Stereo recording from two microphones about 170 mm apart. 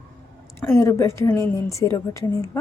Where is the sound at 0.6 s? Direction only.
15° left (ahead or behind).